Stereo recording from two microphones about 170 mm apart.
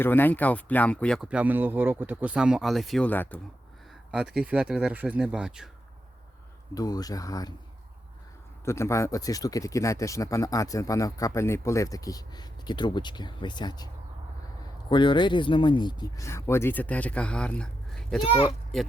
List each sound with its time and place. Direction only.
0.0 s speech: 10° left (ahead or behind)
4.1 s speech: centre (ahead or behind)
6.7 s speech: 20° left (ahead or behind)
8.6 s speech: 15° left (ahead or behind)
18.3 s speech: 30° left (ahead or behind)